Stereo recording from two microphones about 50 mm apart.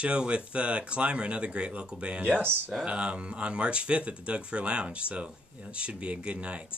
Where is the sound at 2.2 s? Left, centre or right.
Right.